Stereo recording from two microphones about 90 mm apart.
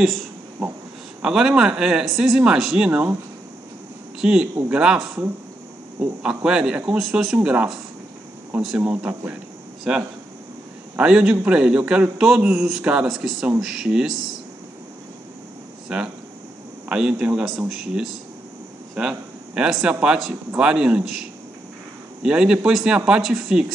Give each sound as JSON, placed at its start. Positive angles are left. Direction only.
{"t": 0.6, "sound": "speech", "side_deg": -20}
{"t": 1.2, "sound": "speech", "side_deg": -10}
{"t": 4.2, "sound": "speech", "side_deg": -10}
{"t": 9.9, "sound": "speech", "side_deg": -5}
{"t": 15.9, "sound": "speech", "side_deg": -10}